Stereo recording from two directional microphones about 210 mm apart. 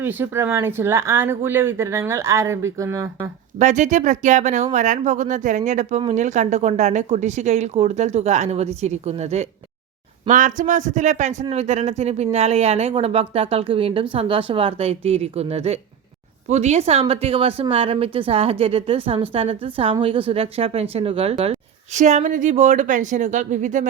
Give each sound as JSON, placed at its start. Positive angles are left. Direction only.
{"t": 0.0, "sound": "speech", "side_deg": -10}
{"t": 3.6, "sound": "a man's voice", "side_deg": -35}